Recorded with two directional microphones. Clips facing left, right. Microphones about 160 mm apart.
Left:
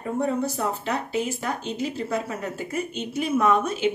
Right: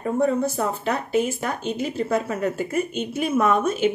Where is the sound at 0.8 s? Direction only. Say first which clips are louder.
Right 4 dB; 50° right (ahead or behind).